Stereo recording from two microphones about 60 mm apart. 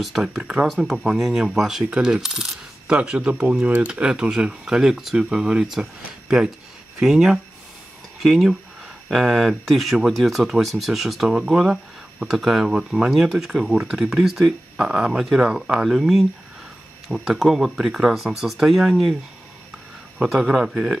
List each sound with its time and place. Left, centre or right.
0.0 s speech: centre
2.0 s coin: centre
2.9 s speech: centre
3.6 s coin: right
3.9 s speech: centre
20.2 s speech: centre